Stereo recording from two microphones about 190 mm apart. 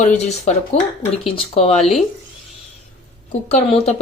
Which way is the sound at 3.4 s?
35° left (ahead or behind).